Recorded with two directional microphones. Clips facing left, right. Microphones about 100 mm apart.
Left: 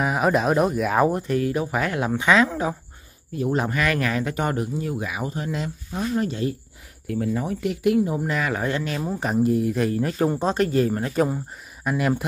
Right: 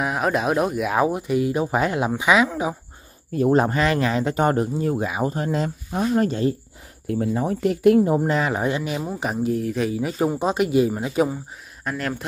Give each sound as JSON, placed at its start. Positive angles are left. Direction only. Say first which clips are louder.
{"t": 0.0, "sound": "speech", "louder": "left 1 dB", "side_deg": 0}
{"t": 3.3, "sound": "speech", "louder": "right 6 dB", "side_deg": -45}
{"t": 3.7, "sound": "speech", "louder": "right 3 dB", "side_deg": -25}
{"t": 7.1, "sound": "speech", "louder": "right 2 dB", "side_deg": -30}
{"t": 8.3, "sound": "speech", "louder": "right 3 dB", "side_deg": -25}
{"t": 9.0, "sound": "speech", "louder": "left 2 dB", "side_deg": -5}
{"t": 11.2, "sound": "speech", "louder": "left 1 dB", "side_deg": 5}